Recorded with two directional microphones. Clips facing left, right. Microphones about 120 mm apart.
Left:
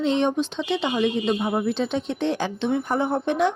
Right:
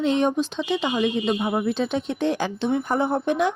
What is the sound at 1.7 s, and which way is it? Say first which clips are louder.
Speech: even; 10° right (ahead or behind).